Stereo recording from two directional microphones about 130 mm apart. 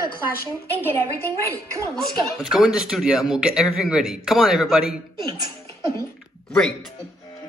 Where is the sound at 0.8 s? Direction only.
20° left (ahead or behind).